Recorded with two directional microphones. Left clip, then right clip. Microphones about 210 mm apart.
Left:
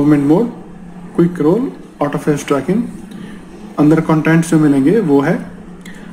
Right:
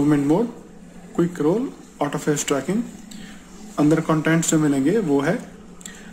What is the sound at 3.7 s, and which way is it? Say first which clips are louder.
Speech: left 7 dB; 15° right (ahead or behind).